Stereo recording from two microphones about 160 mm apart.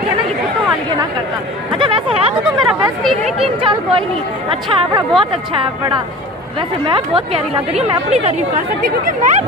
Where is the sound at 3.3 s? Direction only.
35° right (ahead or behind).